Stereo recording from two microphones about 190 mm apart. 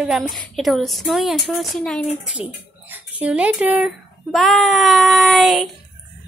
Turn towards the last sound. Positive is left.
turn(degrees=0)  # may be behind; listen again after turning